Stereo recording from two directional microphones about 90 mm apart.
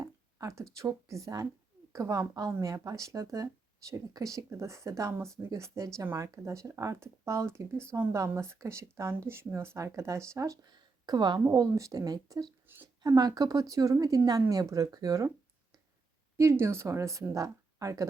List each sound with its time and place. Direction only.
0.0 s a sound: 35° right (ahead or behind)
0.8 s speech: 35° right (ahead or behind)
10.7 s speech: 50° right (ahead or behind)
11.7 s speech: 40° right (ahead or behind)
12.6 s speech: 25° right (ahead or behind)
13.0 s speech: 45° right (ahead or behind)
16.4 s speech: 30° right (ahead or behind)